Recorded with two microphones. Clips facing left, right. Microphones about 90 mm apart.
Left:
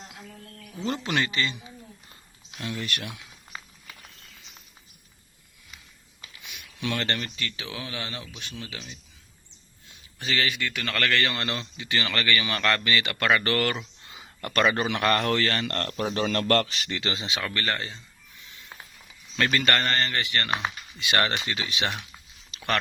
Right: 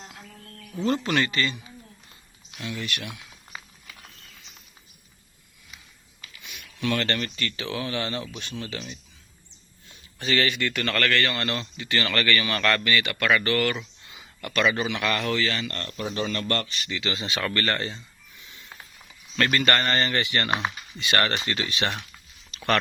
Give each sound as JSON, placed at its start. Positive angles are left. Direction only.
{"t": 0.9, "sound": "a man's voice", "side_deg": 15}
{"t": 2.6, "sound": "speech", "side_deg": 35}
{"t": 6.8, "sound": "speech", "side_deg": 15}
{"t": 10.2, "sound": "a man's voice", "side_deg": 0}
{"t": 14.5, "sound": "a man's voice", "side_deg": 45}
{"t": 15.7, "sound": "a man's voice", "side_deg": 70}
{"t": 17.2, "sound": "a man's voice", "side_deg": 15}
{"t": 19.4, "sound": "speech", "side_deg": 0}
{"t": 21.3, "sound": "a man's voice", "side_deg": 10}